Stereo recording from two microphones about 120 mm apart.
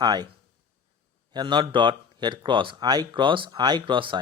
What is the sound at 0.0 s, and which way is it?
Speech, 35° right (ahead or behind).